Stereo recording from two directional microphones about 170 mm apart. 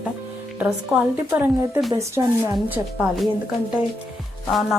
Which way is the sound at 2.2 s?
25° right (ahead or behind).